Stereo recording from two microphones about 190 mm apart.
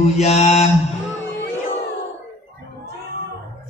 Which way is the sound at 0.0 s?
35° left (ahead or behind).